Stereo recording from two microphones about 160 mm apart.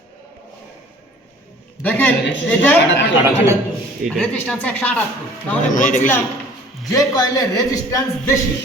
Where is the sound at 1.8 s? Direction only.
10° left (ahead or behind).